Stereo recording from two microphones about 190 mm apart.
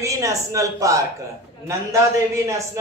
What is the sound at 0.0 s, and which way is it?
A man's voice, 15° right (ahead or behind).